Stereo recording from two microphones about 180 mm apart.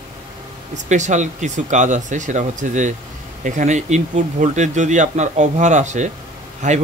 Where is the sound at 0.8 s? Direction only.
40° right (ahead or behind).